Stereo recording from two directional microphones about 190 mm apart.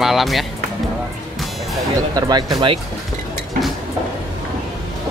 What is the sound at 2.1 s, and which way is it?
Speech, 20° right (ahead or behind).